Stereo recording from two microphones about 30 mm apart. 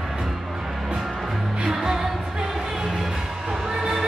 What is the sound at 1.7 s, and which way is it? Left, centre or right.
Music, centre.